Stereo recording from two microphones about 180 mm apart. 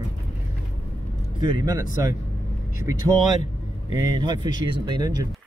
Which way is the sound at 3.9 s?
20° right (ahead or behind).